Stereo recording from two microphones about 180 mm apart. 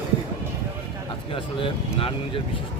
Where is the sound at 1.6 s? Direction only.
30° left (ahead or behind).